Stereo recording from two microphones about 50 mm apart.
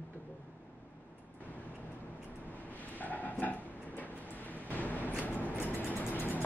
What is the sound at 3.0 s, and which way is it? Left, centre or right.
Vehicle, left.